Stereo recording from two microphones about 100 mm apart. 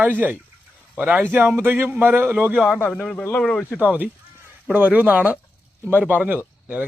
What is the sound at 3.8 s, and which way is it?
A man's voice, 15° right (ahead or behind).